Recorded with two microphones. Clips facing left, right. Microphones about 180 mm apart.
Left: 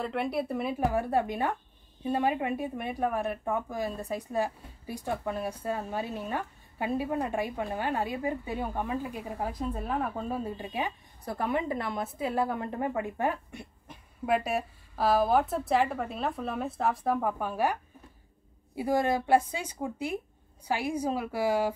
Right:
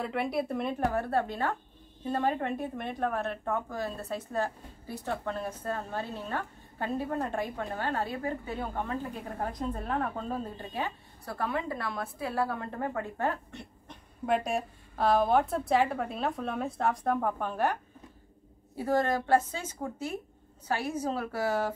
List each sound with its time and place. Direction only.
0.0 s a woman's voice: centre (ahead or behind)
18.8 s speech: 10° left (ahead or behind)